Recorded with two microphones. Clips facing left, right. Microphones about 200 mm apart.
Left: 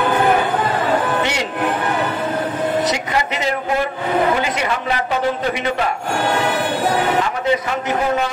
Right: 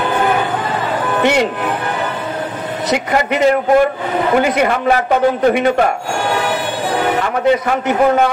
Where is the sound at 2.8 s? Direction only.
55° right (ahead or behind).